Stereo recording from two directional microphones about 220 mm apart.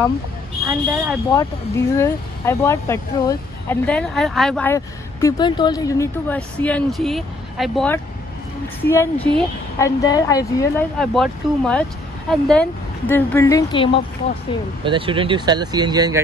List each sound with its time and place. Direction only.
0.7 s speech: 5° right (ahead or behind)
2.0 s speech: 10° left (ahead or behind)
11.0 s speech: 5° left (ahead or behind); by 14.7 s 25° left (ahead or behind)
14.9 s speech: 25° right (ahead or behind)